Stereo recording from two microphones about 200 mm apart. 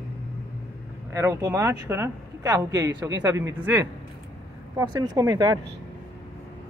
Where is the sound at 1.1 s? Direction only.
15° right (ahead or behind).